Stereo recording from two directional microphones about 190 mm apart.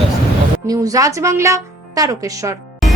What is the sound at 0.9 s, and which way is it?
Speech, 15° right (ahead or behind).